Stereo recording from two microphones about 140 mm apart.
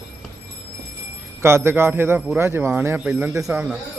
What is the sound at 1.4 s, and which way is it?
Speech, 20° right (ahead or behind).